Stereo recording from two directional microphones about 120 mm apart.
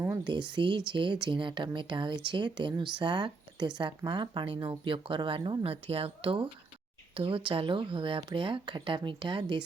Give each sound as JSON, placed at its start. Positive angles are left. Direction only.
{"t": 0.3, "sound": "speech", "side_deg": -40}
{"t": 5.7, "sound": "speech", "side_deg": -55}